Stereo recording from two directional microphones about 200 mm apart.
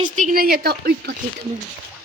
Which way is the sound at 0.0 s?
40° right (ahead or behind).